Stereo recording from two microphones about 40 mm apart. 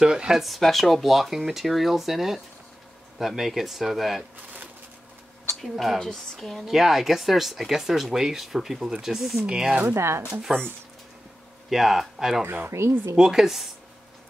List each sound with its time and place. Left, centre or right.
0.0 s speech: centre
0.4 s speech: centre
5.6 s speech: centre
6.6 s speech: centre
9.5 s speech: centre
9.8 s speech: right
10.5 s speech: right
11.7 s speech: centre
12.6 s speech: right
13.2 s speech: centre